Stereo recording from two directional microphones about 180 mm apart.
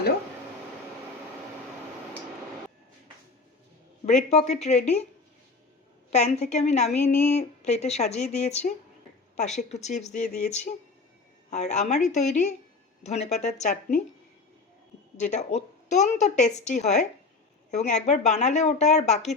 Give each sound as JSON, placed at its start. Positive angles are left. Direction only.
{"t": 4.3, "sound": "a woman's voice", "side_deg": 40}
{"t": 6.1, "sound": "a woman's voice", "side_deg": 40}
{"t": 15.2, "sound": "a woman's voice", "side_deg": 40}